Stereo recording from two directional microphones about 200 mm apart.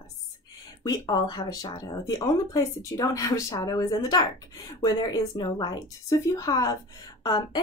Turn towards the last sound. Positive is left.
turn(degrees=20)  # may be behind; listen again after turning